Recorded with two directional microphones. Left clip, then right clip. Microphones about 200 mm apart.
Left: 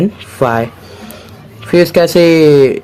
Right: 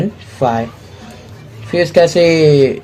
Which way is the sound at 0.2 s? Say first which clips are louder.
Even; 40° left (ahead or behind).